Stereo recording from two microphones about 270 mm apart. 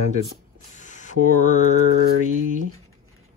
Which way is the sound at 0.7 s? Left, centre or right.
Left.